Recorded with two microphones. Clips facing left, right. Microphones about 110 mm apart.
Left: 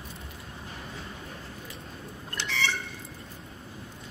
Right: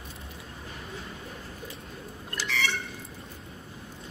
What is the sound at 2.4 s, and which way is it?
Bird, 30° left (ahead or behind).